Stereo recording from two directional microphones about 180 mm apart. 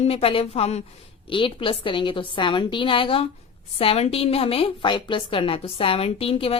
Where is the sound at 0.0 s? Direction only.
35° left (ahead or behind).